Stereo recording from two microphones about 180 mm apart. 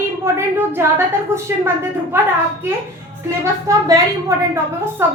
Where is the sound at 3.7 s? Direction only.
20° right (ahead or behind).